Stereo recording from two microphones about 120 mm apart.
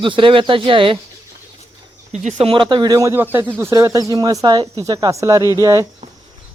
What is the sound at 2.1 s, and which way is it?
Speech, 75° right (ahead or behind).